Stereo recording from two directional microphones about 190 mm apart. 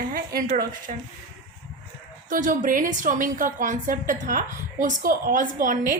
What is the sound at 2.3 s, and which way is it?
A woman's voice, 45° right (ahead or behind).